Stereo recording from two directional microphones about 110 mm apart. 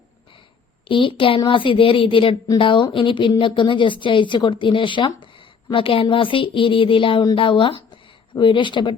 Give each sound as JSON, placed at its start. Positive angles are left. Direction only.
{"t": 0.9, "sound": "speech", "side_deg": 50}